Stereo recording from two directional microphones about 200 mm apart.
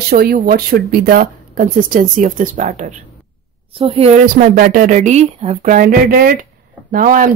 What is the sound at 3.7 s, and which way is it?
Speech, 25° right (ahead or behind).